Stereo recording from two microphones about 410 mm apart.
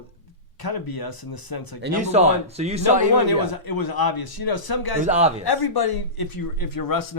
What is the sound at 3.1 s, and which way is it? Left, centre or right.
A man's voice, left.